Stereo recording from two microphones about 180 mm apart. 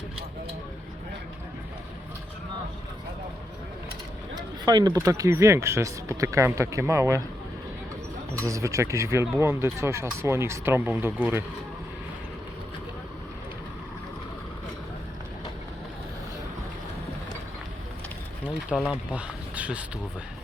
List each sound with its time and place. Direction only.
4.4 s a sound: 20° right (ahead or behind)
5.0 s speech: 20° right (ahead or behind)
8.4 s speech: 15° right (ahead or behind)
18.4 s speech: 5° right (ahead or behind)